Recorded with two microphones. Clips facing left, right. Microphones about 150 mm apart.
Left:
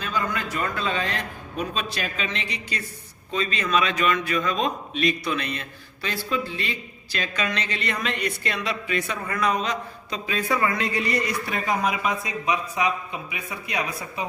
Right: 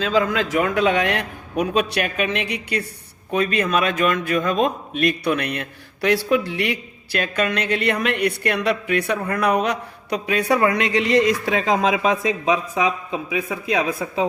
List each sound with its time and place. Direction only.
0.0 s a man's voice: 90° right